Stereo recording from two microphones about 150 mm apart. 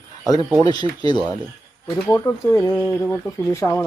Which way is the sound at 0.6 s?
30° left (ahead or behind).